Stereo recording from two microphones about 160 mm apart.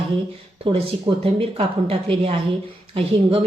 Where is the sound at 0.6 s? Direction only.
35° right (ahead or behind).